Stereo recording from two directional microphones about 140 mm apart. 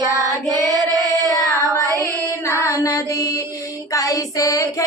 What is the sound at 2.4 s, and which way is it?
Music, 20° left (ahead or behind).